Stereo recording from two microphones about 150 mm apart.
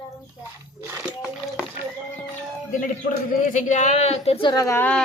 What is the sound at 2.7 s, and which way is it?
Speech, 60° left (ahead or behind).